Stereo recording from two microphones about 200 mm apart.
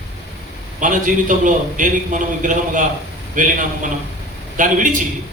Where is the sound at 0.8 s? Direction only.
40° right (ahead or behind).